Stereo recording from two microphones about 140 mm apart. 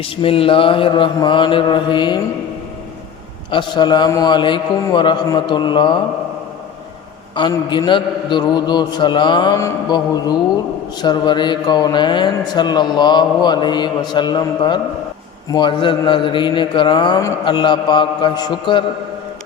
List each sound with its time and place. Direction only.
0.0 s a man's voice: 40° left (ahead or behind)
3.5 s a man's voice: 35° left (ahead or behind)
7.4 s a man's voice: 35° left (ahead or behind)
9.6 s mantra: 25° left (ahead or behind)
11.0 s a man's voice: 30° left (ahead or behind)